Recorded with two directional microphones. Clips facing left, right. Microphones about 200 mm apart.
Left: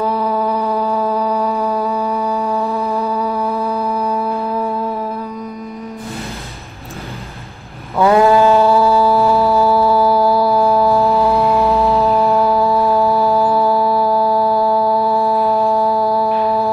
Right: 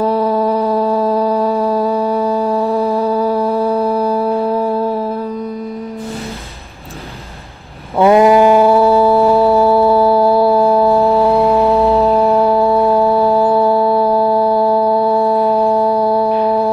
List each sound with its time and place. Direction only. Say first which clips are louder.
0.1 s a sound: right 4 dB; 30° right (ahead or behind)
1.3 s music: right 4 dB; 30° right (ahead or behind)
8.0 s music: right 3 dB; 20° right (ahead or behind)
11.3 s a sound: right 3 dB; 15° right (ahead or behind)
12.1 s music: right 3 dB; 25° right (ahead or behind)
12.6 s music: right 3 dB; centre (ahead or behind)
13.7 s music: right 3 dB; 25° right (ahead or behind)
15.2 s music: right 3 dB; centre (ahead or behind)